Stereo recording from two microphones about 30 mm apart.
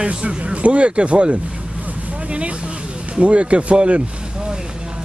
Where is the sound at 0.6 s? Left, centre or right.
Right.